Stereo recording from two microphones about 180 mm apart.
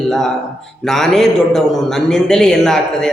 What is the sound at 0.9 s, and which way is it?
A man's voice, centre (ahead or behind).